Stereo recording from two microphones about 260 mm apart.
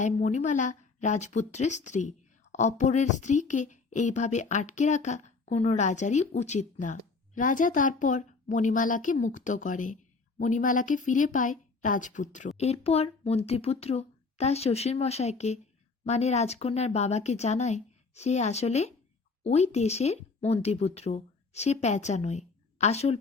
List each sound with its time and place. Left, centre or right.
0.0 s speech: left